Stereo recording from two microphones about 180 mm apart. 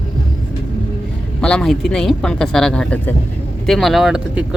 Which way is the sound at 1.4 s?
5° left (ahead or behind).